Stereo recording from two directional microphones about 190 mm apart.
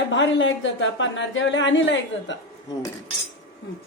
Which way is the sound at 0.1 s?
75° left (ahead or behind).